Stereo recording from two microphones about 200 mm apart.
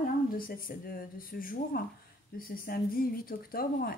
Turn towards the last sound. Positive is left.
turn(degrees=45)  # may be behind; listen again after turning